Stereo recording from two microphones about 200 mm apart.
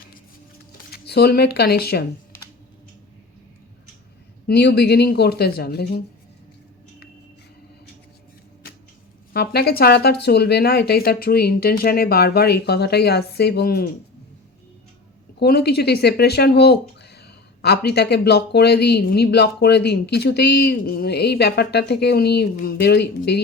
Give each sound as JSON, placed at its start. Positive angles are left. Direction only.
{"t": 0.9, "sound": "speech", "side_deg": 50}
{"t": 4.4, "sound": "speech", "side_deg": 55}
{"t": 9.3, "sound": "speech", "side_deg": 55}
{"t": 15.4, "sound": "speech", "side_deg": 55}